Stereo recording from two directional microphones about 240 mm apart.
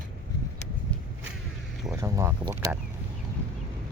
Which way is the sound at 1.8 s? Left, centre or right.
Centre.